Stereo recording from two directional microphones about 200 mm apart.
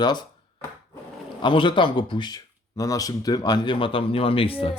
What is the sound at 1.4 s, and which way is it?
Speech, 25° left (ahead or behind).